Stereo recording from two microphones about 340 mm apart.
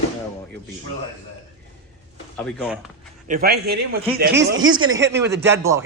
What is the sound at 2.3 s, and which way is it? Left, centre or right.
Speech, centre.